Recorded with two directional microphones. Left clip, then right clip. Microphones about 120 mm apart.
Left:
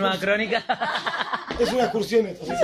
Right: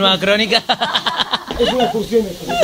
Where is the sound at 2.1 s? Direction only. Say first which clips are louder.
Right 4 dB; 25° left (ahead or behind).